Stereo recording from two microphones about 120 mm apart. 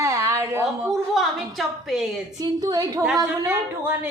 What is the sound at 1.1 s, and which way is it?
Speech, centre (ahead or behind).